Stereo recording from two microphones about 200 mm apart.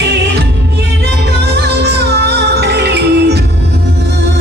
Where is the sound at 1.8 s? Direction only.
55° right (ahead or behind).